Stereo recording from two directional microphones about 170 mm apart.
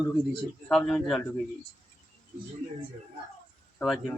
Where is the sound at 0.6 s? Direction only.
5° left (ahead or behind).